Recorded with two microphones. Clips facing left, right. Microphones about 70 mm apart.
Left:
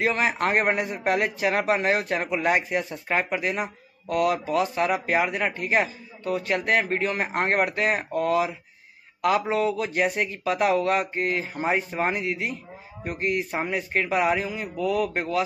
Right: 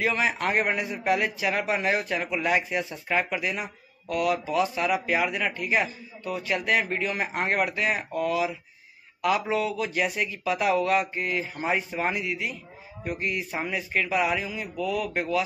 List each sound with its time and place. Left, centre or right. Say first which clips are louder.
0.0 s speech: left 2 dB; left